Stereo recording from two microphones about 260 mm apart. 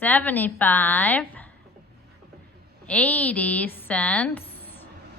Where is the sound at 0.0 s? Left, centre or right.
Centre.